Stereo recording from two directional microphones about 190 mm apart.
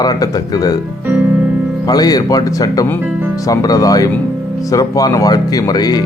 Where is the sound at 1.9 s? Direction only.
20° left (ahead or behind).